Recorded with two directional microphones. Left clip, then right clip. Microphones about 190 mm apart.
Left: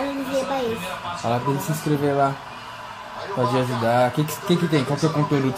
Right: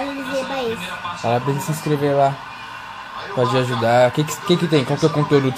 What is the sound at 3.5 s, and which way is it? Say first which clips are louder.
Speech: right 5 dB; 55° right (ahead or behind).